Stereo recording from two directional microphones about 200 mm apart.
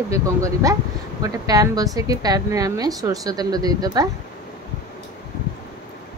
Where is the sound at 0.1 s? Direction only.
15° right (ahead or behind).